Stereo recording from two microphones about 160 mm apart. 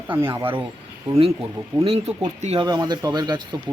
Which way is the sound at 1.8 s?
40° right (ahead or behind).